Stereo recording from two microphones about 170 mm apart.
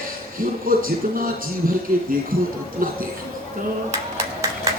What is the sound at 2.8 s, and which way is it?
Speech, 55° right (ahead or behind).